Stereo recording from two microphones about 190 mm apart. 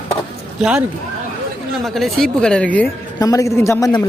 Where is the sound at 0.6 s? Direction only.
5° right (ahead or behind).